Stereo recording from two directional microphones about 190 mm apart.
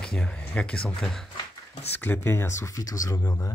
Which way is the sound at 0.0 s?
5° left (ahead or behind).